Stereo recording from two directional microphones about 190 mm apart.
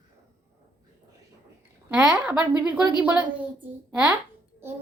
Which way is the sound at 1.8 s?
5° right (ahead or behind).